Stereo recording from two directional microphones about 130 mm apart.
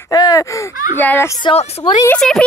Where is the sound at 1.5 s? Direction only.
50° left (ahead or behind).